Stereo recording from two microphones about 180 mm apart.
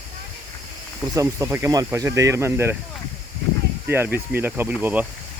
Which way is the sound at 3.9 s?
10° right (ahead or behind).